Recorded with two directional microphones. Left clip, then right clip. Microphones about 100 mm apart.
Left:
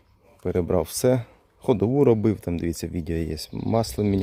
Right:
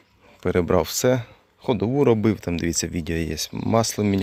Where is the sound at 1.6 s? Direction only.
55° left (ahead or behind).